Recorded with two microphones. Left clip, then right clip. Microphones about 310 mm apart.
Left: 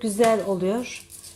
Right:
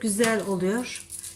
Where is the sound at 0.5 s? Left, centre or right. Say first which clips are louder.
Left 2 dB; centre.